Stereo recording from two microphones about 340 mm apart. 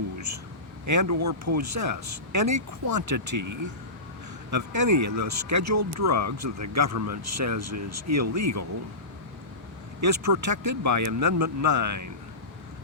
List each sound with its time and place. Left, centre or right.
0.9 s speech: right
4.5 s speech: right
10.0 s speech: right